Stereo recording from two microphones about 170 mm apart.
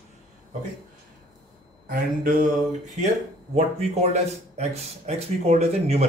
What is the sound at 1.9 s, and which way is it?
Speech, 55° right (ahead or behind).